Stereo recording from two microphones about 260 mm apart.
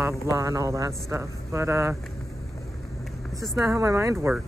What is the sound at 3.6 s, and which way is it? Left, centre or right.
Speech, centre.